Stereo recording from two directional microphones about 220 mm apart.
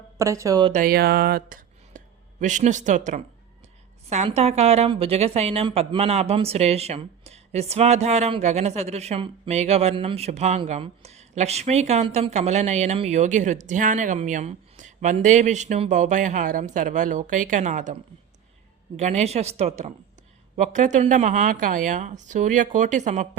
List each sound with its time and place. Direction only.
0.2 s speech: 15° right (ahead or behind)
0.7 s a woman's voice: 40° right (ahead or behind)
18.9 s a woman's voice: 30° right (ahead or behind)